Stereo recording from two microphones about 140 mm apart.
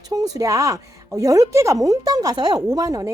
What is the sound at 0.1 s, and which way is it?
Speech, 25° right (ahead or behind).